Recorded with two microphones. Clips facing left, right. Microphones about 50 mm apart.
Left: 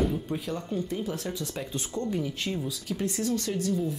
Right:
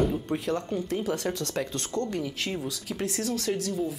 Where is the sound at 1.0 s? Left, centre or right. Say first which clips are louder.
Right 4 dB; right.